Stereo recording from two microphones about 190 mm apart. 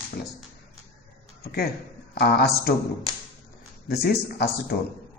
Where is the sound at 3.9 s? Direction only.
55° left (ahead or behind).